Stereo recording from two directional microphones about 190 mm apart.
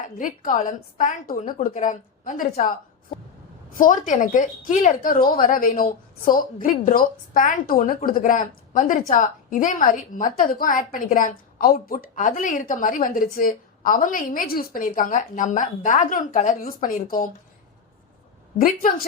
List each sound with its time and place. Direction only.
0.2 s a woman's voice: 45° left (ahead or behind)
18.6 s a woman's voice: 45° left (ahead or behind)